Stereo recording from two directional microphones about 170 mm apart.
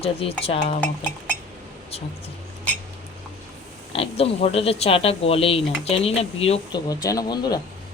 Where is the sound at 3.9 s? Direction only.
35° left (ahead or behind).